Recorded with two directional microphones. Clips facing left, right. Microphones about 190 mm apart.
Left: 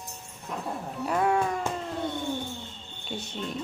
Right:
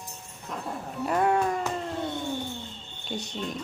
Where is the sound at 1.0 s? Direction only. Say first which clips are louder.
Right 1 dB; centre (ahead or behind).